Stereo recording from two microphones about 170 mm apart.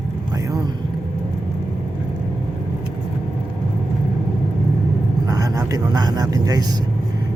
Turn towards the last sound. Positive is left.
turn(degrees=-20)  # may be behind; listen again after turning